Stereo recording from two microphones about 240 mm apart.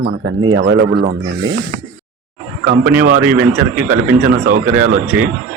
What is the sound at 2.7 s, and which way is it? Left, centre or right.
Speech, right.